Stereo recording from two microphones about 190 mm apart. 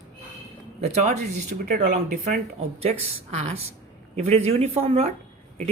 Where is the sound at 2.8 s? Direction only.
35° right (ahead or behind).